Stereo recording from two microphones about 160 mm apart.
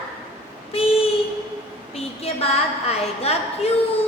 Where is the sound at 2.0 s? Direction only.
40° left (ahead or behind).